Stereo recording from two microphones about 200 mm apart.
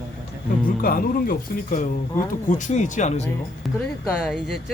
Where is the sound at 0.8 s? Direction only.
45° left (ahead or behind).